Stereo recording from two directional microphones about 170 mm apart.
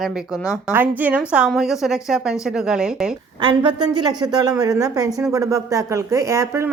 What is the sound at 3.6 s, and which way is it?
A woman's voice, 25° right (ahead or behind).